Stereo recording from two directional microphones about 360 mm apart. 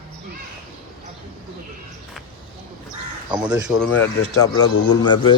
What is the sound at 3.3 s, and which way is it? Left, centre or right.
Speech, centre.